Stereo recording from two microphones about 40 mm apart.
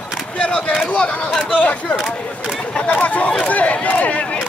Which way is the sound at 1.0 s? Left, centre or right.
Left.